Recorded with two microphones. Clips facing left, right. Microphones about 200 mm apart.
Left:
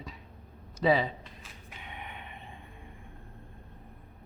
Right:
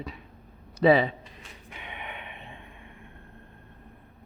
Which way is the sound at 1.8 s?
75° right (ahead or behind).